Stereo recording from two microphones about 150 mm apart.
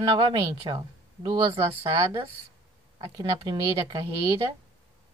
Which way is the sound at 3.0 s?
35° right (ahead or behind).